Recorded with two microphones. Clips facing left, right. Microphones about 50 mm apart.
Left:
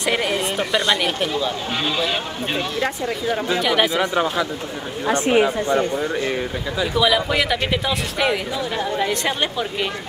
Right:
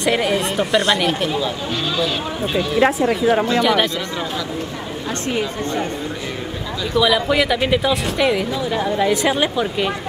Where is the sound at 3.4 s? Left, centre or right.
Centre.